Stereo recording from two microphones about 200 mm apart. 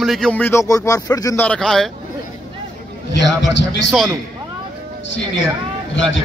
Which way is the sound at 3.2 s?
60° left (ahead or behind).